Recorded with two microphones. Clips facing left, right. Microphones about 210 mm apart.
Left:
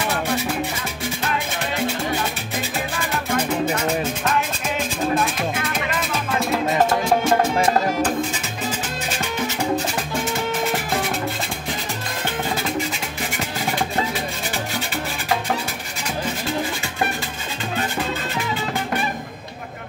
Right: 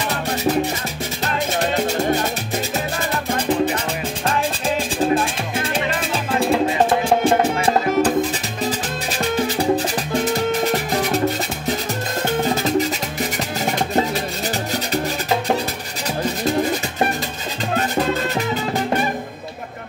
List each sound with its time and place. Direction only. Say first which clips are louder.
0.1 s music: right 2 dB; 40° right (ahead or behind)
2.1 s music: right 3 dB; 40° right (ahead or behind)
10.2 s music: right 5 dB; 40° right (ahead or behind)
12.6 s music: right 6 dB; 40° right (ahead or behind)